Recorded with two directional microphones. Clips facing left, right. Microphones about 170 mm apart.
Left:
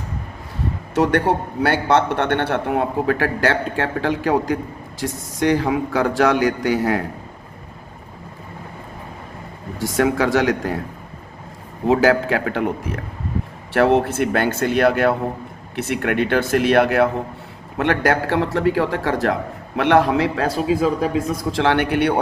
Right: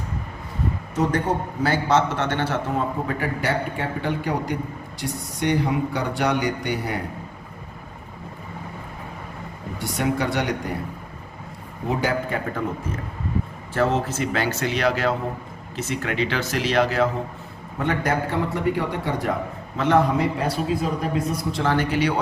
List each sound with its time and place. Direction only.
0.9 s a man's voice: 75° left (ahead or behind); by 7.0 s 90° left
9.7 s a man's voice: 90° left
11.9 s speech: 90° left; by 17.1 s 60° left (ahead or behind)
17.7 s a man's voice: 80° left
21.5 s speech: 75° left (ahead or behind); by 22.2 s 60° left (ahead or behind)